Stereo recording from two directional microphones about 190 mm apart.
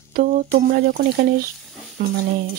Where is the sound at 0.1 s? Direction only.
50° right (ahead or behind).